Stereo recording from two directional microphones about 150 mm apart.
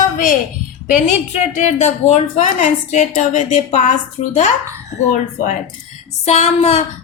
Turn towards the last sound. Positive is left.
turn(degrees=45)  # may be behind; listen again after turning